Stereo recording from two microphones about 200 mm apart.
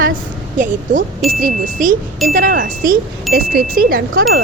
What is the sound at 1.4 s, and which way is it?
A woman's voice, 40° right (ahead or behind).